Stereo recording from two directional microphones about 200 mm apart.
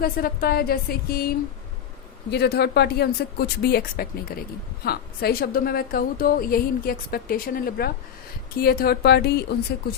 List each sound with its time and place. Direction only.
0.0 s a woman's voice: 50° left (ahead or behind)
2.3 s a woman's voice: 55° left (ahead or behind)